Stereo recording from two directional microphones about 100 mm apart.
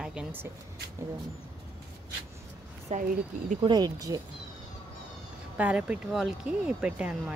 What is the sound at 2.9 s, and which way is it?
Speech, 90° right.